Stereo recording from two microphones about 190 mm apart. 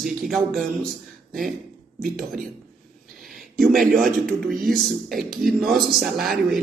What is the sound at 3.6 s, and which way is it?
Speech, 45° right (ahead or behind).